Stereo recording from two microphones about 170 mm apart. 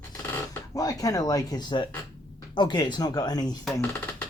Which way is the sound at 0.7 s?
20° left (ahead or behind).